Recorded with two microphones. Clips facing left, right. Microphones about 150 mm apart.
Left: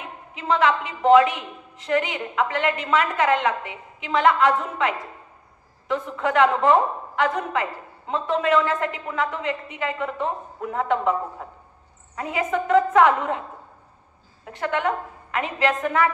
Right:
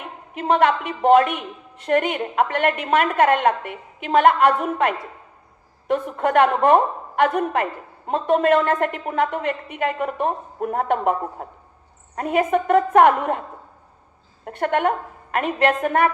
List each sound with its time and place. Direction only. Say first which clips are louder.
0.3 s a woman's voice: right 3 dB; 55° right (ahead or behind)
14.4 s a woman's voice: right 4 dB; 55° right (ahead or behind)